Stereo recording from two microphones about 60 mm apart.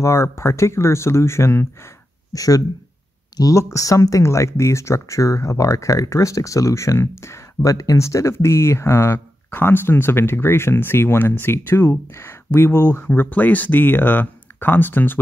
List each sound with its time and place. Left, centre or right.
0.0 s speech: left
2.3 s speech: left
8.0 s speech: left
13.0 s speech: left